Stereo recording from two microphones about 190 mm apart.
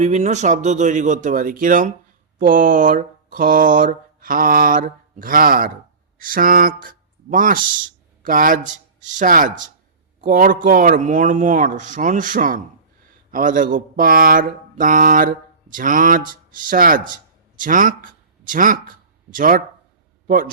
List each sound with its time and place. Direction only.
0.0 s a man's voice: 40° right (ahead or behind)